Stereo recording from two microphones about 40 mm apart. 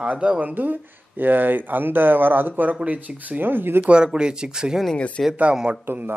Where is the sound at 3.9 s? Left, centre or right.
Right.